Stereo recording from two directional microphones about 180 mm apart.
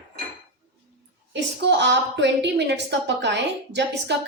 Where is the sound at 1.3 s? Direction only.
75° right (ahead or behind).